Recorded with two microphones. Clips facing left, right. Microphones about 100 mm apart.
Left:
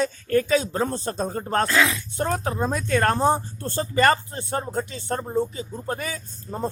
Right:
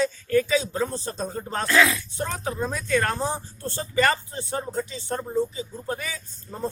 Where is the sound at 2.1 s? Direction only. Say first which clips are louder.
Left 4 dB; 45° left (ahead or behind).